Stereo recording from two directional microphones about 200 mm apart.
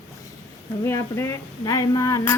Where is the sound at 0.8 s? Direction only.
15° left (ahead or behind).